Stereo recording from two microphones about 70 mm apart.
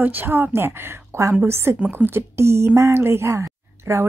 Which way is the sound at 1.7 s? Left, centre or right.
Right.